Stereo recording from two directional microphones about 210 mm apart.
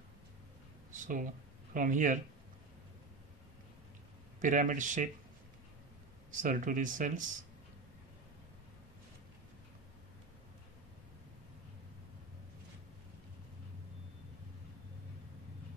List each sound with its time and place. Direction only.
0.9 s speech: 40° right (ahead or behind)
4.4 s speech: 35° right (ahead or behind)
6.3 s speech: 40° right (ahead or behind)